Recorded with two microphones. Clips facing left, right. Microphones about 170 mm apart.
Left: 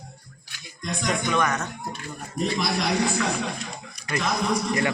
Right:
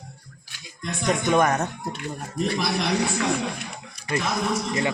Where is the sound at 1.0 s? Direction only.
35° right (ahead or behind).